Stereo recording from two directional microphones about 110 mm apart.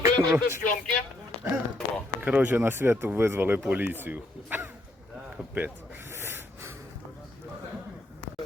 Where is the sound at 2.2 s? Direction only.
15° right (ahead or behind).